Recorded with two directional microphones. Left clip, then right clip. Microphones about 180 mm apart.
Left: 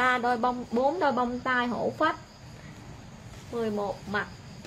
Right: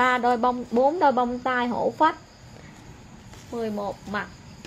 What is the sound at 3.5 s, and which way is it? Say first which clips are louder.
Speech: right 1 dB; 20° right (ahead or behind).